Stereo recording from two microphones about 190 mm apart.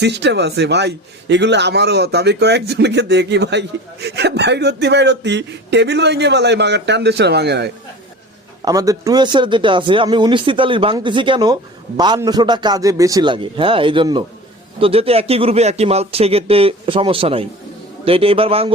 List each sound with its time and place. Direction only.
0.0 s speech: 65° right (ahead or behind)
8.6 s speech: 20° right (ahead or behind)